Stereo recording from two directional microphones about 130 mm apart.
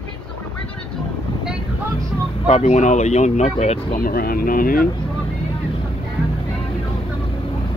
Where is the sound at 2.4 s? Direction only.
60° left (ahead or behind).